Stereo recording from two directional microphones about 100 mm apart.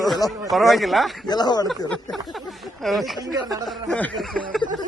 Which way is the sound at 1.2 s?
45° left (ahead or behind).